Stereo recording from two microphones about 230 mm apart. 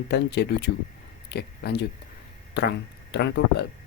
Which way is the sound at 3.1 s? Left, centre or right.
Left.